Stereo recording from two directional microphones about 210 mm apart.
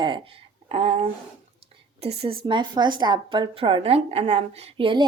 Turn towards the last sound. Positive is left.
turn(degrees=-25)  # may be behind; listen again after turning